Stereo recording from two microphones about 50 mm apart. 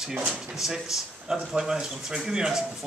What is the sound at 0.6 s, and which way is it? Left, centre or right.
Speech, centre.